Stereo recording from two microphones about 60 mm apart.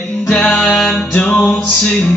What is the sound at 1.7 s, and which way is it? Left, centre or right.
Music, centre.